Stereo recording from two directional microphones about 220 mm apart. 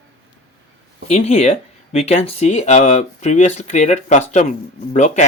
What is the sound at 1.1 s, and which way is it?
Speech, 30° left (ahead or behind).